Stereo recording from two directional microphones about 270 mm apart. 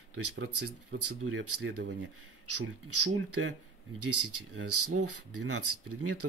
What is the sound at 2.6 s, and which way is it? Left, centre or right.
Speech, right.